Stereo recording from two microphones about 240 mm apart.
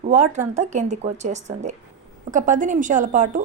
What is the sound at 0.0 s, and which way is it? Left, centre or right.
Speech, right.